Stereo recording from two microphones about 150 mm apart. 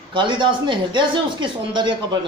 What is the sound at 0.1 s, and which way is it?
Speech, 30° right (ahead or behind).